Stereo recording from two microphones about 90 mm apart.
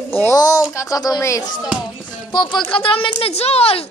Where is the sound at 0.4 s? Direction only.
40° left (ahead or behind).